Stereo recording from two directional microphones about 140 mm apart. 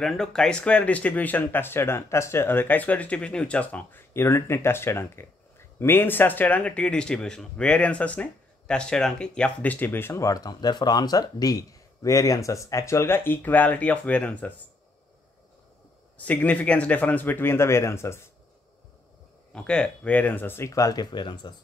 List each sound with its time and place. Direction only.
0.0 s speech: centre (ahead or behind)
16.2 s speech: 10° left (ahead or behind)
19.5 s speech: 5° left (ahead or behind); by 21.5 s 30° left (ahead or behind)